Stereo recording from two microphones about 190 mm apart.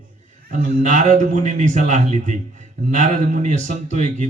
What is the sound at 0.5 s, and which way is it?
A man's voice, 40° right (ahead or behind).